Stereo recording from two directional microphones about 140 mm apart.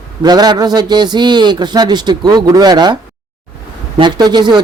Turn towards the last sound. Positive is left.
turn(degrees=-30)  # may be behind; listen again after turning